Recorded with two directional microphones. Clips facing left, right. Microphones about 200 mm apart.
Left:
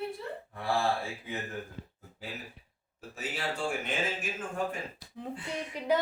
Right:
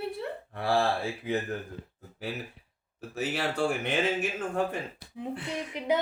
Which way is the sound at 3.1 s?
70° right (ahead or behind).